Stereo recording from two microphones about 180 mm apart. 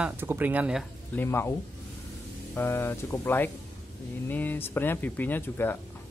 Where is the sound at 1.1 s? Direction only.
15° left (ahead or behind).